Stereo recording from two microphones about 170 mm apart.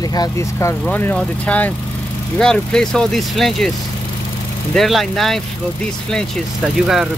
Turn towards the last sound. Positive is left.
turn(degrees=0)  # may be behind; listen again after turning